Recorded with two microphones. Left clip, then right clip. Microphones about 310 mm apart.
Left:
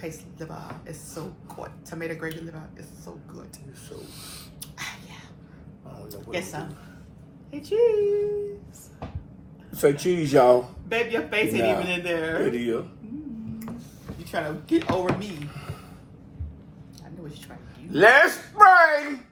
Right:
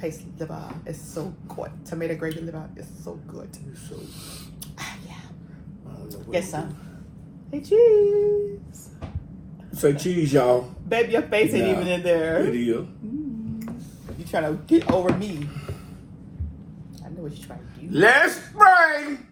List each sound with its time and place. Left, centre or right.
0.0 s speech: centre
4.8 s speech: centre
6.1 s speech: centre
10.2 s speech: left
10.8 s speech: centre
12.4 s a woman's voice: centre
14.3 s speech: centre
17.8 s a woman's voice: centre